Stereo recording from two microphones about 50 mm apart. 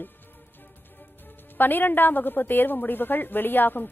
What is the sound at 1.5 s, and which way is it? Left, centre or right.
A woman's voice, left.